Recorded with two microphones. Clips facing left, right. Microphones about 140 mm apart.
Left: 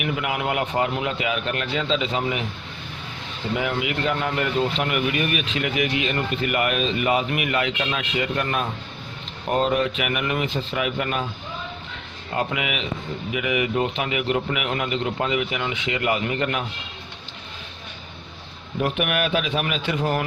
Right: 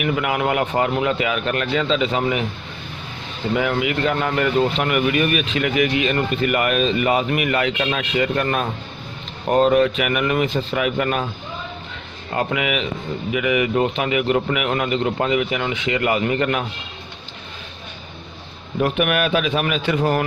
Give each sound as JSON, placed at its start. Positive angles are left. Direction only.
{"t": 0.0, "sound": "speech", "side_deg": -55}
{"t": 3.5, "sound": "speech", "side_deg": -55}
{"t": 12.4, "sound": "speech", "side_deg": -50}
{"t": 18.8, "sound": "speech", "side_deg": -55}